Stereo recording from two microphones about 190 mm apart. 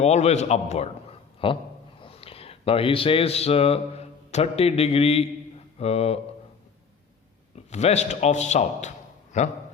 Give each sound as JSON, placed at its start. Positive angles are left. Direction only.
{"t": 0.0, "sound": "a man's voice", "side_deg": 35}
{"t": 7.5, "sound": "a man's voice", "side_deg": 35}